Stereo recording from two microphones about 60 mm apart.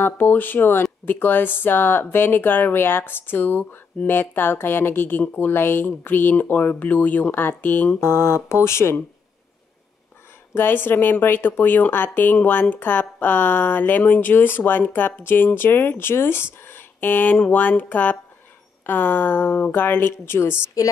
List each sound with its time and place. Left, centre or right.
0.0 s a woman's voice: left
8.0 s speech: left
10.5 s a woman's voice: left
20.8 s a woman's voice: left